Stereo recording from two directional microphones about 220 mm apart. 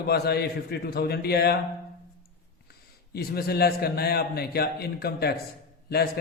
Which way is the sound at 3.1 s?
45° left (ahead or behind).